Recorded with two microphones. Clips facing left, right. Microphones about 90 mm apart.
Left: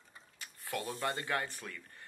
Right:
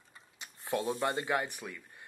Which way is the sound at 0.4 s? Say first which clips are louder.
Right 6 dB; 20° right (ahead or behind).